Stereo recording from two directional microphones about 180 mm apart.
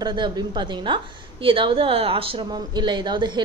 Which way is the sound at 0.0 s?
25° right (ahead or behind).